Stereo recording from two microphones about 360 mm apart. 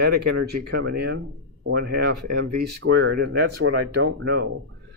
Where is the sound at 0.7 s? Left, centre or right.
Right.